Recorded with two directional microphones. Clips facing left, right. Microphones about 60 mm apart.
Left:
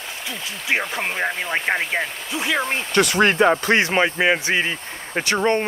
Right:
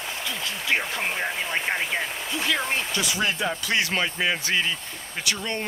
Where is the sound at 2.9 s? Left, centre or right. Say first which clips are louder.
Left 9 dB; left.